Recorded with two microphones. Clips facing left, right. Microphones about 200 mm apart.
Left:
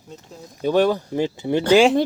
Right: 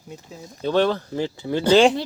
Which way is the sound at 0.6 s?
10° left (ahead or behind).